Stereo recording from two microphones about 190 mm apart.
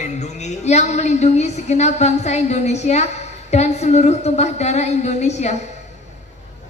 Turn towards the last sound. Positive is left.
turn(degrees=35)  # may be behind; listen again after turning